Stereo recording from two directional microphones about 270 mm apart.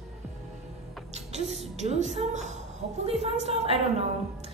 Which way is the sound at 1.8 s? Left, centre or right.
Right.